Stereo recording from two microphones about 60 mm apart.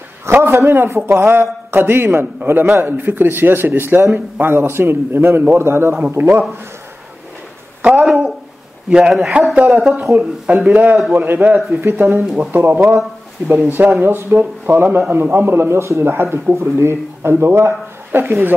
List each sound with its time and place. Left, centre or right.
0.3 s a man's voice: right
7.8 s a sound: centre
8.9 s a man's voice: centre
10.5 s a man's voice: right
11.8 s a man's voice: right
16.1 s speech: right